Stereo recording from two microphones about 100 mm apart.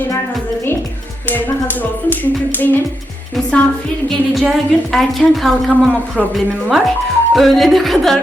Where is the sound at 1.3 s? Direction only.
20° left (ahead or behind).